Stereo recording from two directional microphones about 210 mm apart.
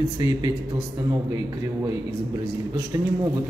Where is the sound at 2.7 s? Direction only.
20° right (ahead or behind).